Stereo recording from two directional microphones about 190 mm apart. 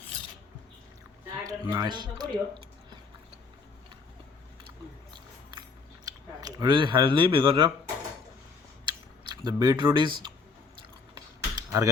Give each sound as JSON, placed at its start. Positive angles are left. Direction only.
{"t": 1.5, "sound": "speech", "side_deg": -20}
{"t": 5.1, "sound": "music", "side_deg": -25}
{"t": 6.1, "sound": "speech", "side_deg": -20}
{"t": 8.9, "sound": "a sound", "side_deg": -20}
{"t": 11.1, "sound": "computer keyboard", "side_deg": -20}